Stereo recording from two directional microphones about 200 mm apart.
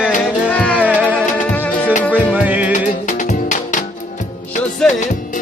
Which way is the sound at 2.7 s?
40° left (ahead or behind).